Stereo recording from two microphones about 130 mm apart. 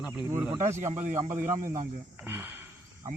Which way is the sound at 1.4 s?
90° right.